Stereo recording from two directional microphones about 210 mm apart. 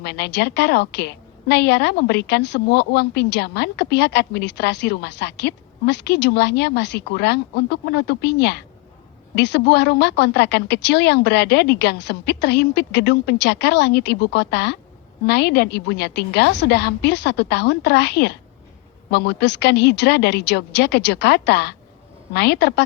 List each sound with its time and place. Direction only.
0.0 s a woman's voice: 50° left (ahead or behind)